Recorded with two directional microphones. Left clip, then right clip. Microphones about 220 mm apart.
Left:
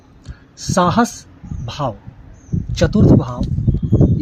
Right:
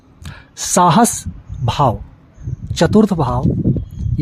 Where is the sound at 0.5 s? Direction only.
45° right (ahead or behind).